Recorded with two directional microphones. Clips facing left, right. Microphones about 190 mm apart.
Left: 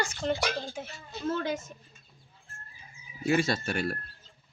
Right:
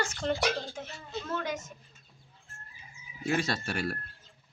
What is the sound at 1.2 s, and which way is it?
Speech, 30° left (ahead or behind).